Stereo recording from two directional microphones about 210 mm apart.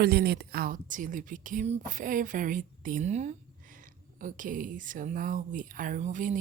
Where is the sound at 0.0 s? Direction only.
50° right (ahead or behind).